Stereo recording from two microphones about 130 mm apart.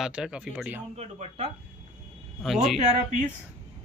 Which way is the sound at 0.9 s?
50° right (ahead or behind).